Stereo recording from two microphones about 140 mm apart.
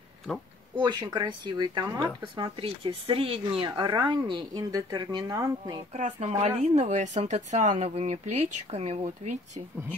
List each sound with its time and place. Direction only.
0.7 s speech: 35° right (ahead or behind)
5.9 s speech: 55° right (ahead or behind)